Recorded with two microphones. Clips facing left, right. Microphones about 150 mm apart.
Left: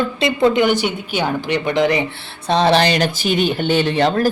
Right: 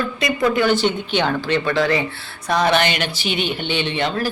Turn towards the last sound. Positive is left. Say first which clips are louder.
# left 6 dB
turn(degrees=40)  # may be behind; listen again after turning